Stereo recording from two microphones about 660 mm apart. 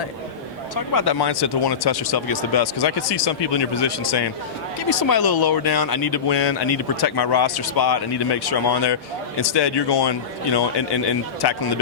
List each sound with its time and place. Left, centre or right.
0.9 s speech: left